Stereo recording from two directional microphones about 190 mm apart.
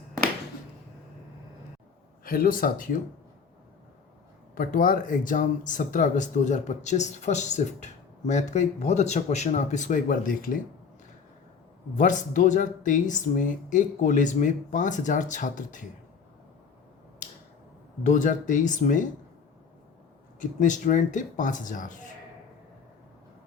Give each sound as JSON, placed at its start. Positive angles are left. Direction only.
{"t": 2.2, "sound": "speech", "side_deg": 50}
{"t": 4.5, "sound": "speech", "side_deg": 45}
{"t": 11.9, "sound": "speech", "side_deg": 40}
{"t": 18.0, "sound": "speech", "side_deg": 40}
{"t": 20.4, "sound": "speech", "side_deg": 40}